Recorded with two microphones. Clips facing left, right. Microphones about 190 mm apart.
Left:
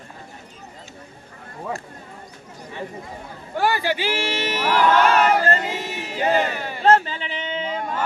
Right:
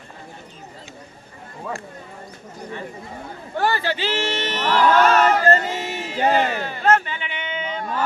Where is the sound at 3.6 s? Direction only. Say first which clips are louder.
Left 1 dB; 10° left (ahead or behind).